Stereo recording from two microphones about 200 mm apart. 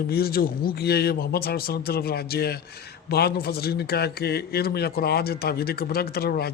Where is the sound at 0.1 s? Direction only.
50° left (ahead or behind).